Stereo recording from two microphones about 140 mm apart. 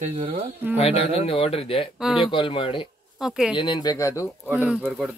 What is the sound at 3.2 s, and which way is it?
Speech, 5° right (ahead or behind).